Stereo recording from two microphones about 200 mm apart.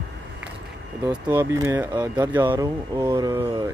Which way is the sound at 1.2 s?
10° right (ahead or behind).